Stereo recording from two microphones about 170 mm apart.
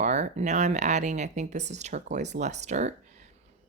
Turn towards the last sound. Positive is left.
turn(degrees=-45)  # may be behind; listen again after turning